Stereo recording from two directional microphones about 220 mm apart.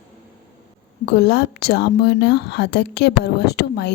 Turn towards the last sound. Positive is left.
turn(degrees=50)  # may be behind; listen again after turning